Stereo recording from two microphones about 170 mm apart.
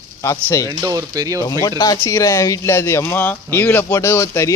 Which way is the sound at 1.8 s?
20° left (ahead or behind).